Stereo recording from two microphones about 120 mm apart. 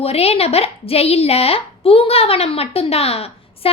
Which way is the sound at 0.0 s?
55° left (ahead or behind).